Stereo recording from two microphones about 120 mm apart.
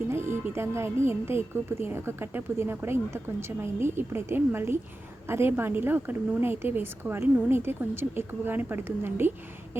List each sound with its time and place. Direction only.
0.1 s a woman's voice: 20° right (ahead or behind)